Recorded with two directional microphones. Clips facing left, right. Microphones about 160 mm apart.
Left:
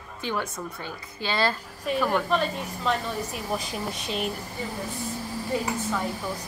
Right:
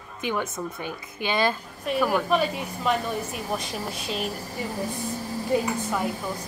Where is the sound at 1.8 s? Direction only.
5° right (ahead or behind).